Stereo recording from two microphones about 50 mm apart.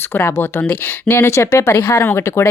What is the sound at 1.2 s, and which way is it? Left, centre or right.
Speech, left.